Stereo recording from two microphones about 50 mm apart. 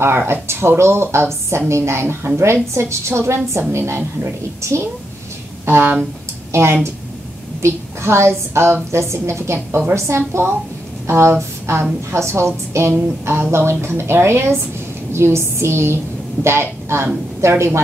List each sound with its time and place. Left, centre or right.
0.3 s a woman's voice: right
2.7 s a woman's voice: right
5.7 s a woman's voice: right
11.7 s a woman's voice: right